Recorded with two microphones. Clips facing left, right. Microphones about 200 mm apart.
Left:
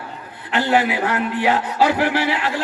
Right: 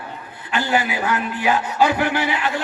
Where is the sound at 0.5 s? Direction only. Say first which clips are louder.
Left 3 dB; 70° left (ahead or behind).